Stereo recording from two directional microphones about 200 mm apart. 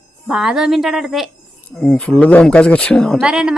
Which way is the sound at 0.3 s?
Centre (ahead or behind).